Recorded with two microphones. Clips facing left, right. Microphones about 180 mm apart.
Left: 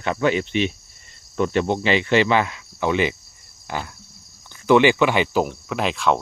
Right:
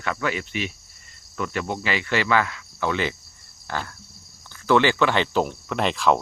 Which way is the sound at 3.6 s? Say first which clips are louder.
Left 1 dB; 15° left (ahead or behind).